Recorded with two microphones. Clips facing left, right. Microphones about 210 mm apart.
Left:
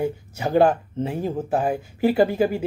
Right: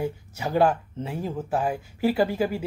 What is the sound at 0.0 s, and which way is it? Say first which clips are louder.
A woman's voice: left 4 dB; 20° left (ahead or behind).